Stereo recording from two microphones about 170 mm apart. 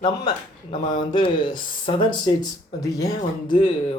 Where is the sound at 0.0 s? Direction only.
25° left (ahead or behind).